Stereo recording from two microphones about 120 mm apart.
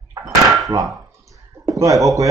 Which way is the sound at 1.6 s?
30° right (ahead or behind).